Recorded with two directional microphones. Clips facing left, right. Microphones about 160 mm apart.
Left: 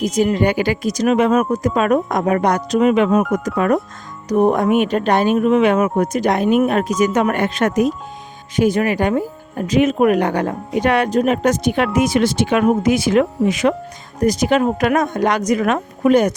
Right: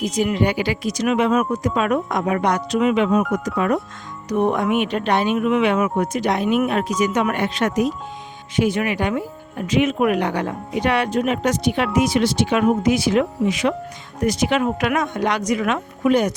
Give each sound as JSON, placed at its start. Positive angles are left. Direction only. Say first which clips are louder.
{"t": 0.0, "sound": "speech", "louder": "left 4 dB", "side_deg": 45}
{"t": 4.3, "sound": "speech", "louder": "left 4 dB", "side_deg": 40}